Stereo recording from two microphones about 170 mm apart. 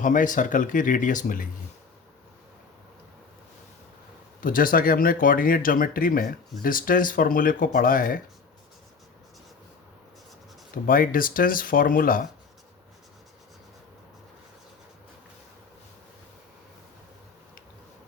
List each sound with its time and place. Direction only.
0.0 s speech: 50° left (ahead or behind)
4.4 s speech: 55° left (ahead or behind)
10.8 s speech: 55° left (ahead or behind)